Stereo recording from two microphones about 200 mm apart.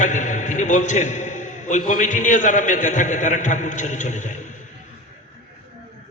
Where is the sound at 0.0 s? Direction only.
40° left (ahead or behind).